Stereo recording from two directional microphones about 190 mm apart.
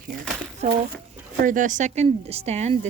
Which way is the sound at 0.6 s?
35° right (ahead or behind).